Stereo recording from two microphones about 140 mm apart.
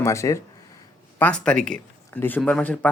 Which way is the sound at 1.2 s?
5° left (ahead or behind).